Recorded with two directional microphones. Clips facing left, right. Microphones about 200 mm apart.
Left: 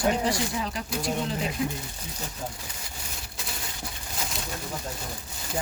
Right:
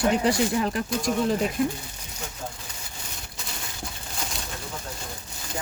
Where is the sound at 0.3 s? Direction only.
55° right (ahead or behind).